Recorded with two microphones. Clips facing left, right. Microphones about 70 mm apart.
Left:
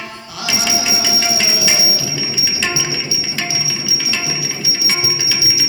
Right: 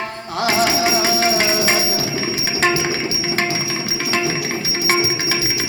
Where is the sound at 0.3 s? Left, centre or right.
Right.